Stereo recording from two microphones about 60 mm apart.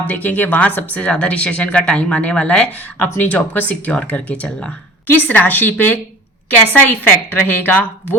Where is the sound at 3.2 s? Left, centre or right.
Left.